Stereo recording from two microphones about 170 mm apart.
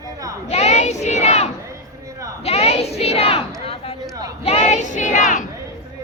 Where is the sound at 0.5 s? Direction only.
40° left (ahead or behind).